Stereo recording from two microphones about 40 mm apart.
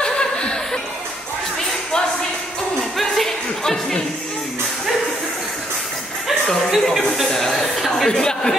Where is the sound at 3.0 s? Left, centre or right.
Centre.